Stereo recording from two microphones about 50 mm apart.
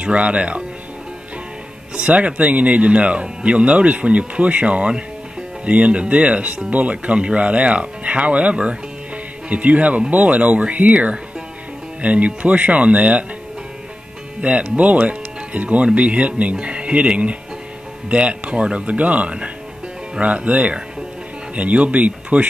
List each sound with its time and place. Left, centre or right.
0.0 s speech: right
2.0 s speech: right
14.4 s speech: right